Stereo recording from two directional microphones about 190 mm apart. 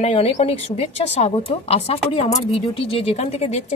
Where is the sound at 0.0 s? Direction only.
35° left (ahead or behind).